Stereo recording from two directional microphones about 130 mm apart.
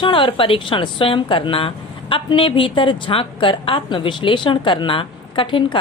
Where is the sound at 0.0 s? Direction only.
40° left (ahead or behind).